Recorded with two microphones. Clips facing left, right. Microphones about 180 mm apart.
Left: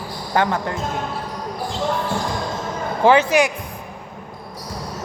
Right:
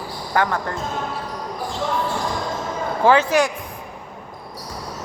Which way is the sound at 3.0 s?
20° left (ahead or behind).